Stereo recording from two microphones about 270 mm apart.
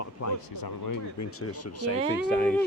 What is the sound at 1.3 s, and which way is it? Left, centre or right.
Speech, left.